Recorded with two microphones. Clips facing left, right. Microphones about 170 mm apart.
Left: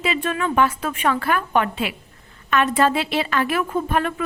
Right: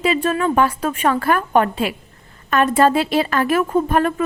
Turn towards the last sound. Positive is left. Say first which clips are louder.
# right 5 dB
turn(degrees=-40)  # may be behind; listen again after turning